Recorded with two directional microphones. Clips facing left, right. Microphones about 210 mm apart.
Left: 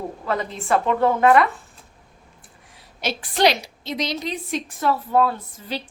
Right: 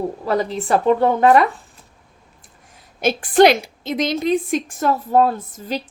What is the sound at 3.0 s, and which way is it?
A woman's voice, 50° right (ahead or behind).